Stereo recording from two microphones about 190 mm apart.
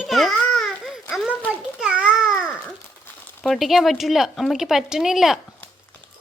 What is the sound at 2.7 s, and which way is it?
Speech, 5° left (ahead or behind).